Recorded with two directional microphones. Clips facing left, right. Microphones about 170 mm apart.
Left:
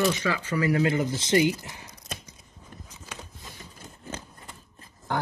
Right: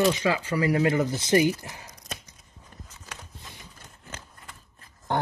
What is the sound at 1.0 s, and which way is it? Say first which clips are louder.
Speech: right 1 dB; 25° left (ahead or behind).